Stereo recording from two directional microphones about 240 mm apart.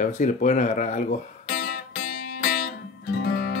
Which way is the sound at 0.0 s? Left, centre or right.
Left.